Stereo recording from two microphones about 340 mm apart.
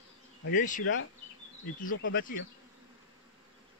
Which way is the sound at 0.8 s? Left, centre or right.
Left.